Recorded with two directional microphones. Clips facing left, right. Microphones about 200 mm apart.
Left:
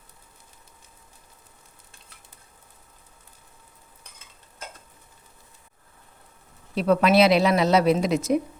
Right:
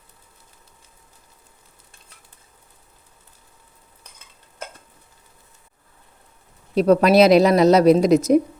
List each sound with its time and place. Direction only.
6.7 s a woman's voice: 40° right (ahead or behind)